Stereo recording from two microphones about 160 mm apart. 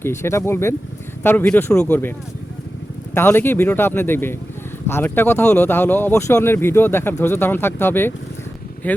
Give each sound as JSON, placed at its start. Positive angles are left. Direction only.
{"t": 0.0, "sound": "speech", "side_deg": 15}
{"t": 3.2, "sound": "speech", "side_deg": 15}